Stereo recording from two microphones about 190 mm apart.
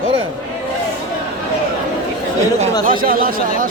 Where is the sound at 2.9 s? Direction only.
50° right (ahead or behind).